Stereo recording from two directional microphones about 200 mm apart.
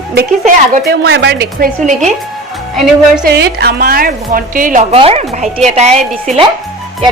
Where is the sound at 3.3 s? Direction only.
55° right (ahead or behind).